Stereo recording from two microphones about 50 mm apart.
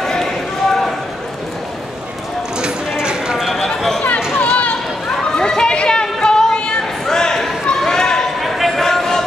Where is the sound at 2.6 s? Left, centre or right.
Centre.